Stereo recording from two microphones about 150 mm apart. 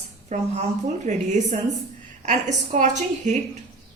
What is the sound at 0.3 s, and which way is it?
A woman's voice, 50° right (ahead or behind).